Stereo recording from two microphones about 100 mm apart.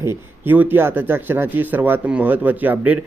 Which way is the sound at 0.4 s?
20° right (ahead or behind).